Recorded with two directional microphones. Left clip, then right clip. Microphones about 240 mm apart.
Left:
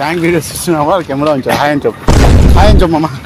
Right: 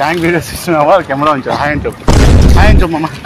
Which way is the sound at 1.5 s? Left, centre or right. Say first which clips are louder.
Left 2 dB; centre.